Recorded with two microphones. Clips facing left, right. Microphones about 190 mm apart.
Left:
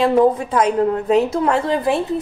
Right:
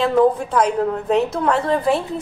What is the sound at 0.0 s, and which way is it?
A woman's voice, 5° left (ahead or behind).